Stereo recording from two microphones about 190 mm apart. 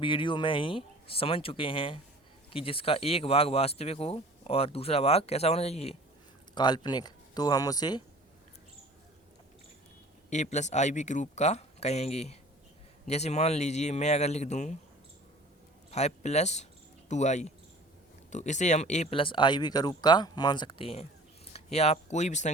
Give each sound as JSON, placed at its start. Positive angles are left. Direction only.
{"t": 0.0, "sound": "speech", "side_deg": 25}
{"t": 6.5, "sound": "speech", "side_deg": 25}
{"t": 10.2, "sound": "speech", "side_deg": 40}
{"t": 15.9, "sound": "speech", "side_deg": 35}